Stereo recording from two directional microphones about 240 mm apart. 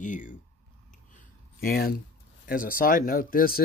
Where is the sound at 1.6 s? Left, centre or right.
Left.